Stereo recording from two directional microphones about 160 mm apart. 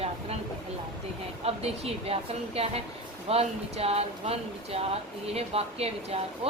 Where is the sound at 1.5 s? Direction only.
40° right (ahead or behind).